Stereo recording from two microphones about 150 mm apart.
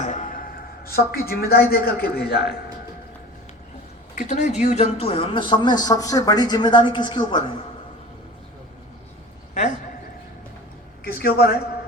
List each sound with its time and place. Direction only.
0.0 s a sound: 60° left (ahead or behind)
1.0 s a man's voice: 90° left
4.1 s speech: 50° left (ahead or behind); by 7.4 s 30° left (ahead or behind)
11.2 s a man's voice: 90° left